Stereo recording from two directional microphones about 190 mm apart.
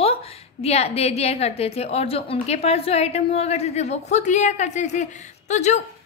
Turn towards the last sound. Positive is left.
turn(degrees=35)  # may be behind; listen again after turning